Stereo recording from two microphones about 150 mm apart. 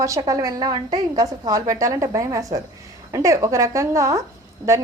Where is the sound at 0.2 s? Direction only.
25° right (ahead or behind).